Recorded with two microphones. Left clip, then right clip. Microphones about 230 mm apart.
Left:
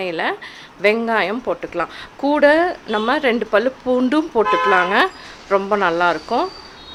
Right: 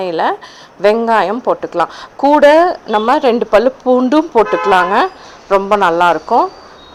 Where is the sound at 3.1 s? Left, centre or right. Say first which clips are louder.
Right 6 dB; centre.